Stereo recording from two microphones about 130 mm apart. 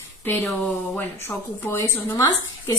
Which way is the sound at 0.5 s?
15° left (ahead or behind).